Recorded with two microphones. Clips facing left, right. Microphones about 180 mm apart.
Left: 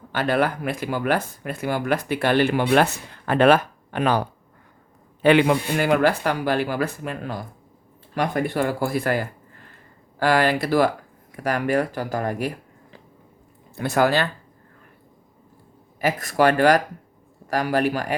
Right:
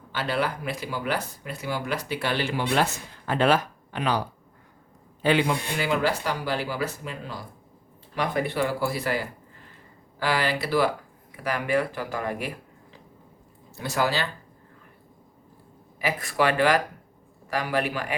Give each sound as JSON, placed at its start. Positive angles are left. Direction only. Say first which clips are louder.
{"t": 0.1, "sound": "speech", "louder": "left 6 dB", "side_deg": 55}
{"t": 5.2, "sound": "speech", "louder": "left 6 dB", "side_deg": 65}
{"t": 13.7, "sound": "speech", "louder": "left 6 dB", "side_deg": 55}
{"t": 16.0, "sound": "speech", "louder": "left 5 dB", "side_deg": 45}